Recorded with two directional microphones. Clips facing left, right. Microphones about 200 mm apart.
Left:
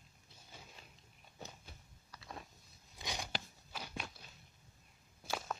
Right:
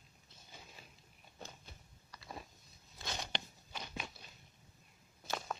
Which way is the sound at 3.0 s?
10° left (ahead or behind).